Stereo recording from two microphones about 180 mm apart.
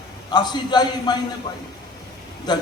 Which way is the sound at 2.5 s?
25° left (ahead or behind).